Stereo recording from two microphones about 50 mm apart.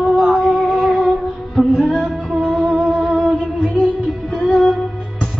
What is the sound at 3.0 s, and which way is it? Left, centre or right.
Music, right.